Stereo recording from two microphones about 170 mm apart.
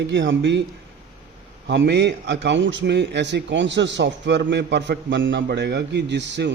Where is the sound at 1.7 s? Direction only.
85° right.